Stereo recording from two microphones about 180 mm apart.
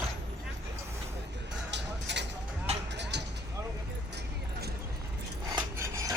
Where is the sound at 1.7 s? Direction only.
75° right (ahead or behind).